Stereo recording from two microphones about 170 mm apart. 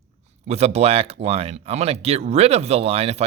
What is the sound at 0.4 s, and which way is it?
Speech, 40° right (ahead or behind).